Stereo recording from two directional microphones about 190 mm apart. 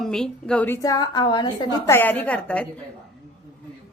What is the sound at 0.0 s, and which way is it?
A woman's voice, 5° left (ahead or behind).